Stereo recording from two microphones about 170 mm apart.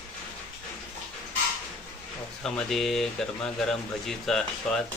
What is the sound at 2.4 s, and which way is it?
Speech, centre (ahead or behind).